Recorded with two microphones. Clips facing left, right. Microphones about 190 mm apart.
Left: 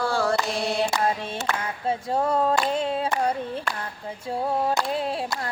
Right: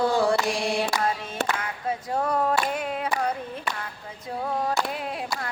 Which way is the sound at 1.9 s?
25° left (ahead or behind).